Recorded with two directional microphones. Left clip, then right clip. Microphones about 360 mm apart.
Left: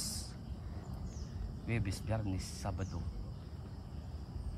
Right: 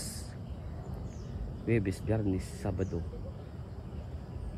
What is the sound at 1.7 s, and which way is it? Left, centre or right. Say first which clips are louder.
Speech: right 9 dB; centre.